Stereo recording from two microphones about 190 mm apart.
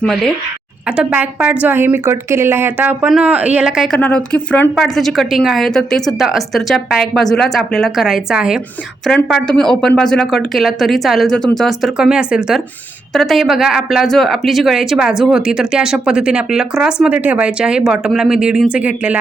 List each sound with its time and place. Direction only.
0.0 s speech: 5° left (ahead or behind)
0.9 s speech: 10° right (ahead or behind)